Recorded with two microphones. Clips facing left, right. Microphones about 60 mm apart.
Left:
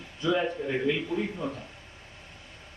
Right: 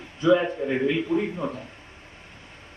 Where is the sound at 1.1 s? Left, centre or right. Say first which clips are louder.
Right 6 dB; right.